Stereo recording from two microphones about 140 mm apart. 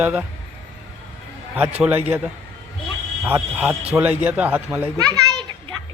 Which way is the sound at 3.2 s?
10° right (ahead or behind).